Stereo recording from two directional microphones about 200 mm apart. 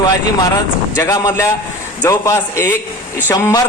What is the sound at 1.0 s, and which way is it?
A man's voice, 15° left (ahead or behind).